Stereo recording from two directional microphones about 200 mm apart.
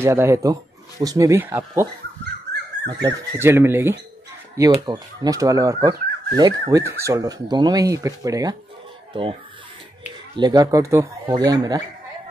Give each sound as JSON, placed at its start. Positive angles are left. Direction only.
{"t": 0.0, "sound": "speech", "side_deg": -15}
{"t": 3.0, "sound": "speech", "side_deg": -15}